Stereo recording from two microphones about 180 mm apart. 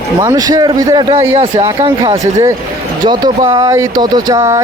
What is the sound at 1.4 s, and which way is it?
Speech, 35° right (ahead or behind).